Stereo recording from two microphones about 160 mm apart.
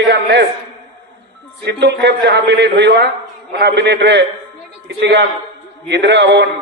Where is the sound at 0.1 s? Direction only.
90° right.